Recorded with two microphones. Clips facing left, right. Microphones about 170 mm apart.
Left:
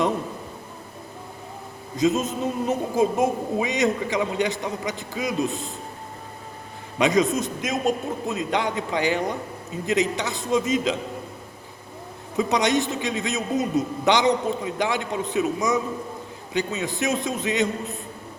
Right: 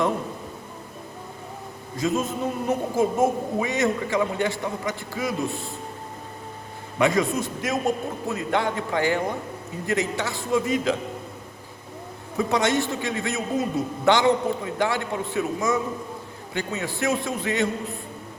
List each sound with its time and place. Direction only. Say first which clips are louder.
2.0 s a woman's voice: left 3 dB; 20° left (ahead or behind)
7.0 s a woman's voice: left 1 dB; 20° left (ahead or behind)
12.4 s a woman's voice: left 1 dB; 20° left (ahead or behind)